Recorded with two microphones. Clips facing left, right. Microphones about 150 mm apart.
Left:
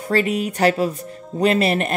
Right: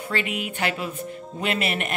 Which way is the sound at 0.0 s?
40° left (ahead or behind).